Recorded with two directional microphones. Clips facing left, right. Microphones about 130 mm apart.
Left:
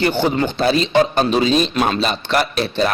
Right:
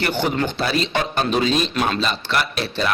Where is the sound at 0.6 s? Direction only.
25° left (ahead or behind).